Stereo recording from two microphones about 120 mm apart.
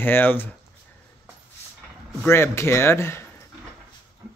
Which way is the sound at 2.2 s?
20° left (ahead or behind).